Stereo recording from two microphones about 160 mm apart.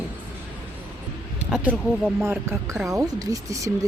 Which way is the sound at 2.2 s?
15° right (ahead or behind).